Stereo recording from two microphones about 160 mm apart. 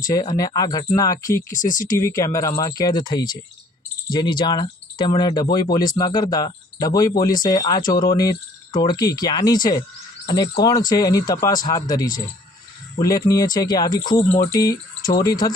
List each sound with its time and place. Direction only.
0.2 s speech: 25° left (ahead or behind)
1.5 s speech: 55° left (ahead or behind)
2.0 s speech: 20° left (ahead or behind)